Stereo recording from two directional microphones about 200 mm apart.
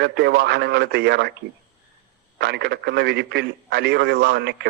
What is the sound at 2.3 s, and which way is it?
Speech, 55° right (ahead or behind).